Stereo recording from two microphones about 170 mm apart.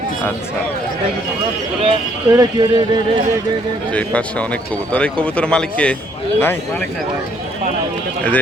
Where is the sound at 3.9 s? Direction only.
10° left (ahead or behind).